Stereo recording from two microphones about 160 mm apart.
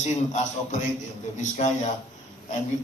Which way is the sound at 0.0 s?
45° left (ahead or behind).